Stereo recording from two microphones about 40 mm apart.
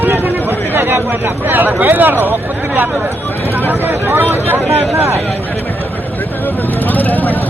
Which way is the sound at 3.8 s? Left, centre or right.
Right.